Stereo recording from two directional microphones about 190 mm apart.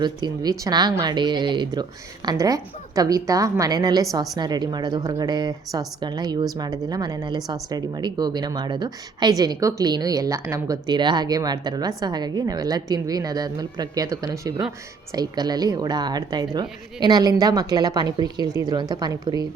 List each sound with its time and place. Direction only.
0.0 s speech: 20° right (ahead or behind)